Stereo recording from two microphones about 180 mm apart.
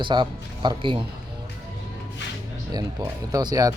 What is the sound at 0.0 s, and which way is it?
A man's voice, 25° right (ahead or behind).